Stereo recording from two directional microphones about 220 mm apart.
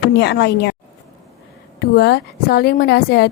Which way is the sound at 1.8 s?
50° left (ahead or behind).